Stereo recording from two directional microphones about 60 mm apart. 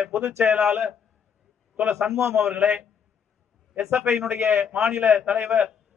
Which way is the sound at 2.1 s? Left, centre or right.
Right.